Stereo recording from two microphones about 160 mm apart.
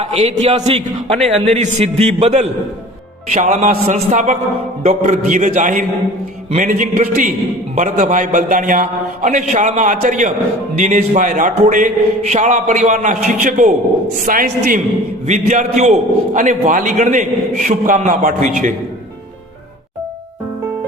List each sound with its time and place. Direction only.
0.0 s a man's voice: 40° right (ahead or behind)